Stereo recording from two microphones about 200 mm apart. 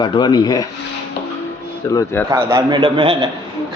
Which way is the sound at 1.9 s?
15° left (ahead or behind).